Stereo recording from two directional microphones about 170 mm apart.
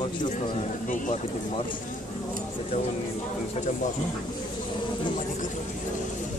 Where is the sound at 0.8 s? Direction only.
50° left (ahead or behind).